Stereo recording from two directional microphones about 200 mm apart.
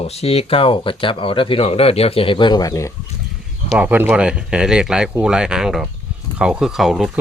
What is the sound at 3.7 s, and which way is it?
Speech, 5° right (ahead or behind).